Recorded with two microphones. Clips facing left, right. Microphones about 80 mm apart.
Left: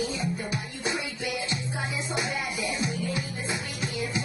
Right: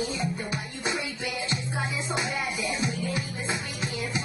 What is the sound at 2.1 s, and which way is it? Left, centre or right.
Music, right.